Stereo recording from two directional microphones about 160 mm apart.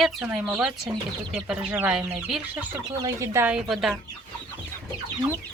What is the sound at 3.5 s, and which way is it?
Speech, centre (ahead or behind).